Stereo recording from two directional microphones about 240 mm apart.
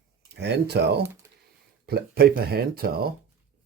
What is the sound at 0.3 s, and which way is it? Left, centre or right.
Speech, right.